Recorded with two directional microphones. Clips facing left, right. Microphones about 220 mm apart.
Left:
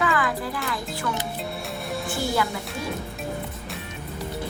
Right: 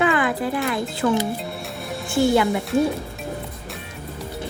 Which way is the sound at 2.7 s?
50° right (ahead or behind).